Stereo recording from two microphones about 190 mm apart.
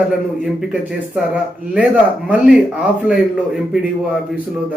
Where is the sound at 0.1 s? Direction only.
5° right (ahead or behind).